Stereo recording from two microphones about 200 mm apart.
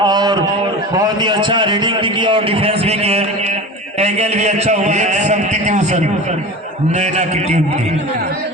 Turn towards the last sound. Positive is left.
turn(degrees=-35)  # may be behind; listen again after turning